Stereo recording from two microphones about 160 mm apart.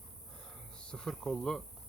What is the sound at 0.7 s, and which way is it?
Speech, 5° left (ahead or behind).